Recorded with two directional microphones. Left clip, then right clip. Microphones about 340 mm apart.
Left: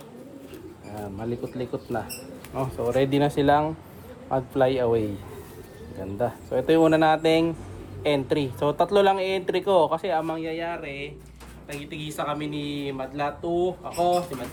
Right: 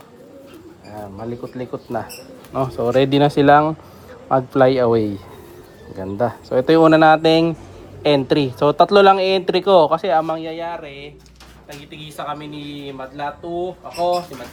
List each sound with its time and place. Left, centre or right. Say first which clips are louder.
1.2 s speech: right 2 dB; centre
6.1 s speech: right 7 dB; right; by 14.2 s centre